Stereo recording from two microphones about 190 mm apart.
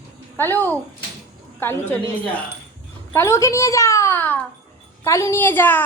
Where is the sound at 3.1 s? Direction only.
15° left (ahead or behind).